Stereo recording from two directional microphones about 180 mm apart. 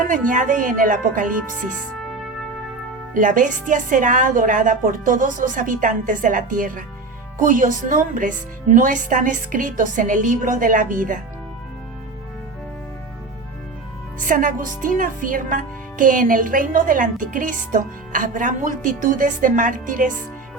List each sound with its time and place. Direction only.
0.0 s speech: 45° right (ahead or behind)
3.2 s speech: 45° right (ahead or behind)
14.2 s speech: 45° right (ahead or behind)